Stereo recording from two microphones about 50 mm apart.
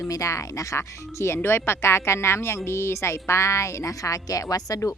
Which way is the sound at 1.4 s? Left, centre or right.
Left.